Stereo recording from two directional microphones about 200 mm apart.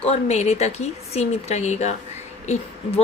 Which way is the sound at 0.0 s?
30° left (ahead or behind).